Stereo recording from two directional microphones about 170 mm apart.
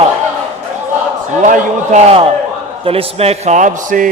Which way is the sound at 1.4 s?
45° right (ahead or behind).